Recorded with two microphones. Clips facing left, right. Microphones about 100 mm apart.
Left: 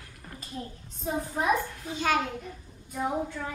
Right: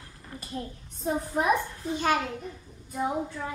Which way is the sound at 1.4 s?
15° right (ahead or behind).